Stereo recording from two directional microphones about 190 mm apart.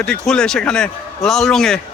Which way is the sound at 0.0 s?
5° left (ahead or behind).